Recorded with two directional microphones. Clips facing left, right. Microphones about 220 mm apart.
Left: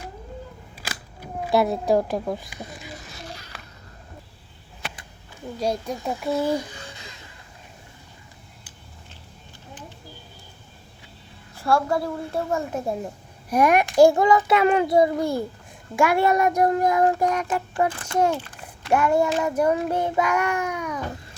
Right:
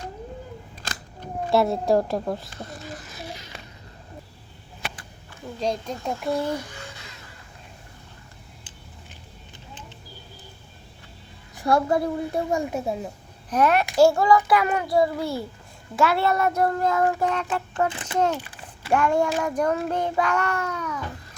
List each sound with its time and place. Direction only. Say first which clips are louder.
0.8 s a sound: even; 10° left (ahead or behind)
3.2 s a sound: right 2 dB; 15° right (ahead or behind)
5.5 s child singing: left 1 dB; 10° left (ahead or behind)
11.5 s a child's voice: right 1 dB; 20° right (ahead or behind)
12.8 s a woman's voice: left 1 dB; centre (ahead or behind)
13.5 s a child's voice: left 2 dB; 10° left (ahead or behind)
16.0 s child singing: left 2 dB; 15° left (ahead or behind)
17.9 s a child's voice: left 1 dB; 10° right (ahead or behind)
18.3 s a sound: left 1 dB; 10° right (ahead or behind)
18.9 s child singing: left 1 dB; 5° left (ahead or behind)